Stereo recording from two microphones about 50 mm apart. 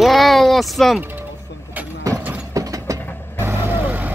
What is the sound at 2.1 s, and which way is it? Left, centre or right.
Clip-clop, right.